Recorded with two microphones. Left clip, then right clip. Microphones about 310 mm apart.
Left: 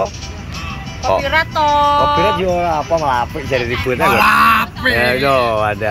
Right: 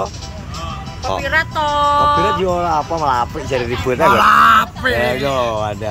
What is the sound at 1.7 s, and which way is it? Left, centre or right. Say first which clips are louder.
Speech: left 2 dB; centre.